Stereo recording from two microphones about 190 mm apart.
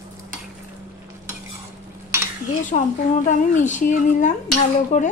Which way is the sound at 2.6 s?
40° left (ahead or behind).